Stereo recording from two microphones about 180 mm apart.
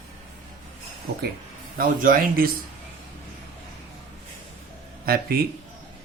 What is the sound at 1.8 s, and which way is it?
Speech, 50° right (ahead or behind).